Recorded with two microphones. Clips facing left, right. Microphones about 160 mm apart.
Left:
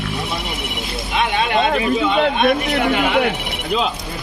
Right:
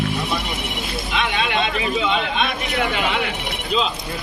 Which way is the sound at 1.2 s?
45° left (ahead or behind).